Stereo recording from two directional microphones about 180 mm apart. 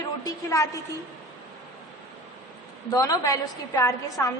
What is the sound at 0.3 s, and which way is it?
Speech, 20° left (ahead or behind).